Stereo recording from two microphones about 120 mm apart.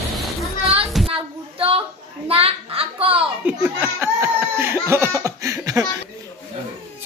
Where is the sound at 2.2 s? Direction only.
50° right (ahead or behind).